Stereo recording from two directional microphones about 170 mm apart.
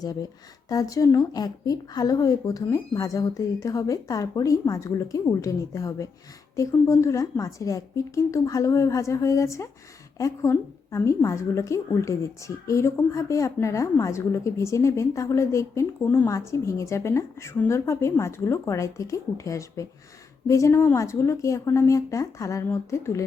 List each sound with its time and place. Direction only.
0.0 s a woman's voice: 20° left (ahead or behind)